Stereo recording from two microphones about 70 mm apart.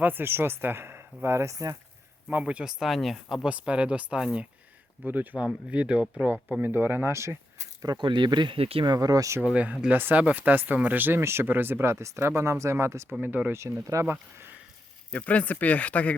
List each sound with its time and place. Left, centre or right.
0.0 s speech: right
2.3 s speech: centre
3.5 s speech: centre
5.0 s speech: right
7.8 s speech: right
9.5 s speech: centre; by 13.1 s right
13.2 s speech: right
13.6 s speech: right
14.0 s speech: right
15.1 s speech: left